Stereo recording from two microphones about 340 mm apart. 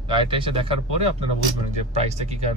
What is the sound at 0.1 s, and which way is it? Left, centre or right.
Speech, centre.